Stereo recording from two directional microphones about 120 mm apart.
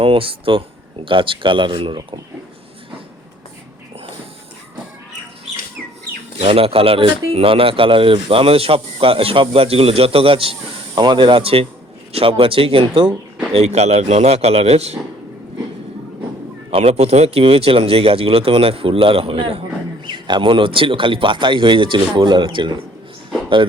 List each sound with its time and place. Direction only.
0.0 s speech: 50° right (ahead or behind)
6.4 s speech: 55° right (ahead or behind)
16.7 s speech: 60° right (ahead or behind)
20.1 s speech: 40° right (ahead or behind)